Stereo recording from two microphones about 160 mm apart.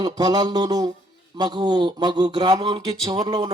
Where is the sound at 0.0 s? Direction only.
25° right (ahead or behind).